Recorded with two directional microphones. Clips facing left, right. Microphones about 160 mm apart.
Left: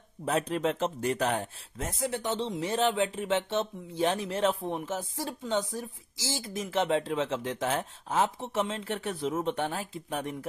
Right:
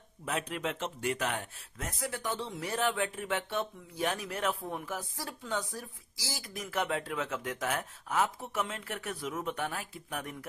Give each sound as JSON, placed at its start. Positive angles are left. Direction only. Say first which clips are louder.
{"t": 0.2, "sound": "speech", "louder": "left 7 dB", "side_deg": 35}